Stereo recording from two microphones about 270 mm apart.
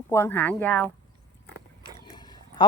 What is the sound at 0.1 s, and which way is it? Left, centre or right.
Speech, centre.